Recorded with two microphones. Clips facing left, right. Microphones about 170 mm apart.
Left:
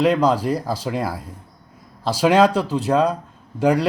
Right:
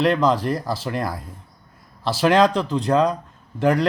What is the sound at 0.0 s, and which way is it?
Speech, 10° left (ahead or behind).